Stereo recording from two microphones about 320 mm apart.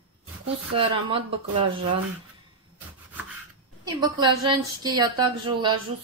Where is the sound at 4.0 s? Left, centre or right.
Centre.